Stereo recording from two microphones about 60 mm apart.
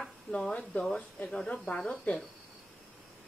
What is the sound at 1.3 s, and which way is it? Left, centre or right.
Speech, centre.